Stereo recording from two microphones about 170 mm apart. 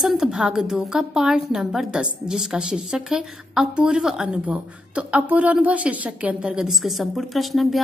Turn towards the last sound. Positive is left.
turn(degrees=0)  # may be behind; listen again after turning